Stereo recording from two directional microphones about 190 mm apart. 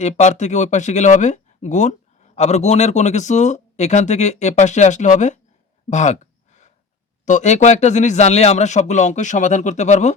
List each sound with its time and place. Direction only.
0.2 s speech: 40° left (ahead or behind)
5.9 s gasp: 40° left (ahead or behind)
7.3 s speech: 40° left (ahead or behind)